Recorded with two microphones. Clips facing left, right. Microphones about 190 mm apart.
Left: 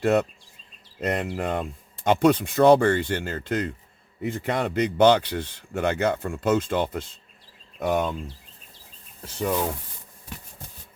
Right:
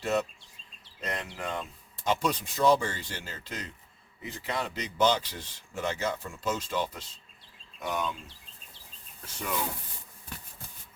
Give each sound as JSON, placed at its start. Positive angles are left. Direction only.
{"t": 0.0, "sound": "speech", "side_deg": 60}
{"t": 9.2, "sound": "speech", "side_deg": 30}